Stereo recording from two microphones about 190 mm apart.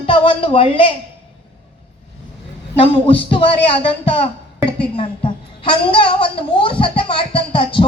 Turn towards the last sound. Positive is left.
turn(degrees=25)  # may be behind; listen again after turning